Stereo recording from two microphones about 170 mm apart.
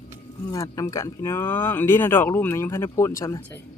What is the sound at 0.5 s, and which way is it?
Speech, 20° left (ahead or behind).